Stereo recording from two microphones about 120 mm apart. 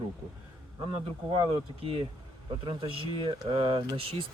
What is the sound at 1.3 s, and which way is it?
Speech, 45° right (ahead or behind).